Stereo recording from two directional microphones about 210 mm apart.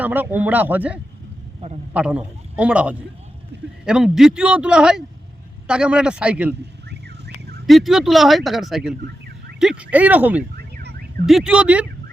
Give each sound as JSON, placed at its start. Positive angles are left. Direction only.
{"t": 0.0, "sound": "a man's voice", "side_deg": -10}
{"t": 3.5, "sound": "speech", "side_deg": -55}
{"t": 3.8, "sound": "speech", "side_deg": -5}
{"t": 7.7, "sound": "speech", "side_deg": 0}